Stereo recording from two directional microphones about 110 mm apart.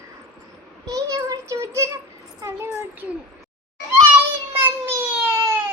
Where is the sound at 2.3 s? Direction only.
25° right (ahead or behind).